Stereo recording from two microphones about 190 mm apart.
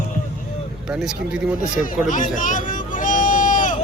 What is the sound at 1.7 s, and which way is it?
Hubbub, 45° left (ahead or behind).